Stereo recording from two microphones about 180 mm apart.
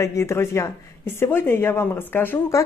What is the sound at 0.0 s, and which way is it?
Speech, 15° left (ahead or behind).